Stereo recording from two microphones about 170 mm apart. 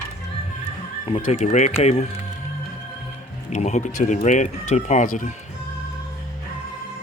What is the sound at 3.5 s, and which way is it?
Speech, 40° left (ahead or behind).